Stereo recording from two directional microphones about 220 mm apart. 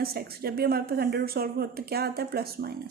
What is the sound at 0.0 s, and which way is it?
A woman's voice, 45° right (ahead or behind).